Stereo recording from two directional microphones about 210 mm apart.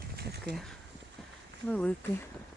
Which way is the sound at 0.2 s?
50° right (ahead or behind).